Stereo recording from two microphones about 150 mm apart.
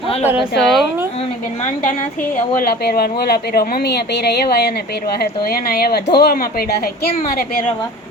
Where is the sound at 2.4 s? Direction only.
75° left (ahead or behind).